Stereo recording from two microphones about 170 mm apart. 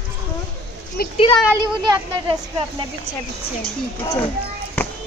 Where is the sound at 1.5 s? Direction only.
25° right (ahead or behind).